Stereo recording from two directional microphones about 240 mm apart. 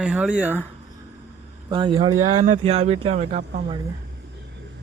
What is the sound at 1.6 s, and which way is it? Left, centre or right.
Speech, centre.